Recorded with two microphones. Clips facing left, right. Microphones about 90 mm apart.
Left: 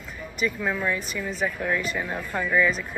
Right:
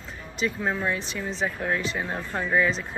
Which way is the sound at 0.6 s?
25° right (ahead or behind).